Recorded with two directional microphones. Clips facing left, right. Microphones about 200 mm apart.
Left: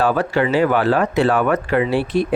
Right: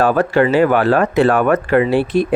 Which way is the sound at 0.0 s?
55° right (ahead or behind).